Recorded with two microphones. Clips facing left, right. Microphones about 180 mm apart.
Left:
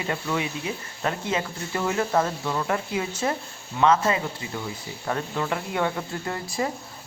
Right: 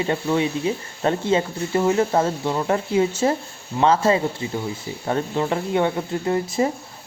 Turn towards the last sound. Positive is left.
turn(degrees=-20)  # may be behind; listen again after turning